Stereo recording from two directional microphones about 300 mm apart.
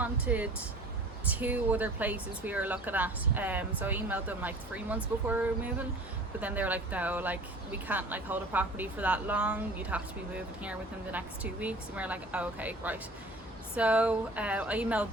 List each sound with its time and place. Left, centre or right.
0.0 s speech: centre